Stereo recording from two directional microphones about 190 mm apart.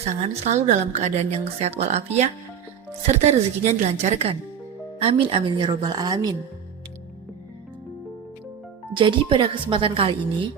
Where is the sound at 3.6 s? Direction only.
35° right (ahead or behind).